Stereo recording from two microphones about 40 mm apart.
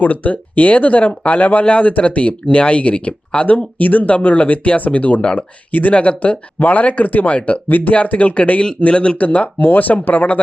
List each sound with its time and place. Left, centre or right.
0.0 s speech: left
7.7 s speech: left
7.9 s speech: left